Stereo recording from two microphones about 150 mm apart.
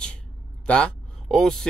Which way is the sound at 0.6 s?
5° left (ahead or behind).